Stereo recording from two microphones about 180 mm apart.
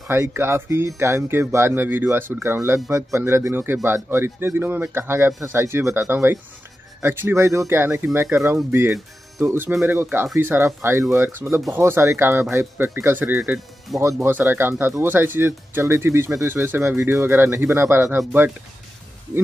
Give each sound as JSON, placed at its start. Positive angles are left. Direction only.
{"t": 0.1, "sound": "speech", "side_deg": -15}
{"t": 13.9, "sound": "speech", "side_deg": 0}
{"t": 14.2, "sound": "speech", "side_deg": -15}